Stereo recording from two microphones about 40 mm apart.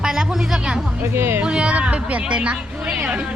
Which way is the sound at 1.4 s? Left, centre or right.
Right.